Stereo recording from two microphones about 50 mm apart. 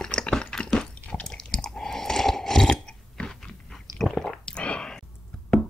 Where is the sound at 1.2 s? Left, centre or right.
Centre.